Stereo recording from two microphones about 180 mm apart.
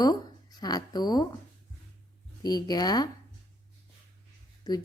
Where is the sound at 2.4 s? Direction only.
20° left (ahead or behind).